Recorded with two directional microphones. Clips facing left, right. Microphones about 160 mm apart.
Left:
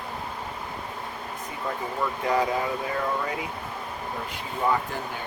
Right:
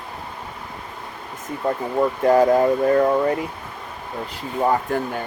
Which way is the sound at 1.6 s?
50° right (ahead or behind).